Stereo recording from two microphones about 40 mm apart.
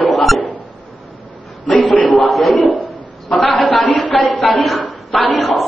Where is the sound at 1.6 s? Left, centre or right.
Left.